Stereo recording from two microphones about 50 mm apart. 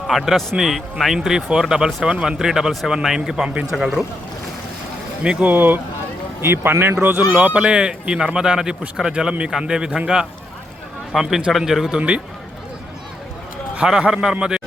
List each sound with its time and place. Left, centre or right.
0.1 s a man's voice: centre
5.4 s speech: right
6.4 s speech: right
7.3 s speech: right
7.6 s speech: centre
11.1 s a man's voice: centre
14.1 s speech: centre